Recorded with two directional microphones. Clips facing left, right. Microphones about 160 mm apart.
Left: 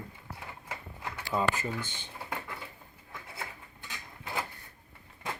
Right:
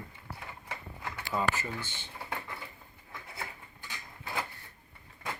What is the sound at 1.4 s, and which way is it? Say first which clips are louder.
Speech: left 2 dB; 20° left (ahead or behind).